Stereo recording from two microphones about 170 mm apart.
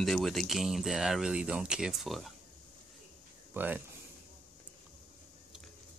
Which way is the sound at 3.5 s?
10° right (ahead or behind).